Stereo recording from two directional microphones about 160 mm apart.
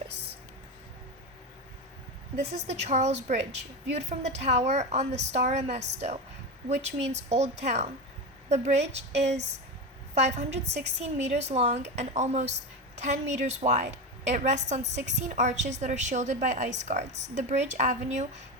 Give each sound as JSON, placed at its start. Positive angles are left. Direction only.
{"t": 2.6, "sound": "a woman's voice", "side_deg": -45}